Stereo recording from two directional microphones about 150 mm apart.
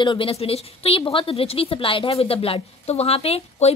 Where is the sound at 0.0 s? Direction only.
35° left (ahead or behind).